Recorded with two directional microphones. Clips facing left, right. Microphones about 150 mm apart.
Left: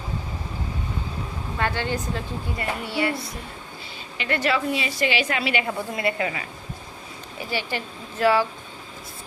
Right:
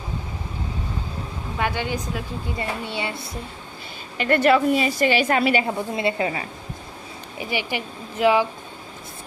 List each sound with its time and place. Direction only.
1.5 s speech: 15° right (ahead or behind)
4.2 s a woman's voice: 50° right (ahead or behind)
5.6 s a woman's voice: 25° right (ahead or behind)
7.3 s speech: 15° right (ahead or behind)